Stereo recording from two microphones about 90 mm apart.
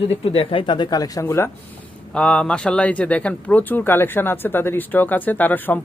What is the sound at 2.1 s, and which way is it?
Speech, 10° left (ahead or behind).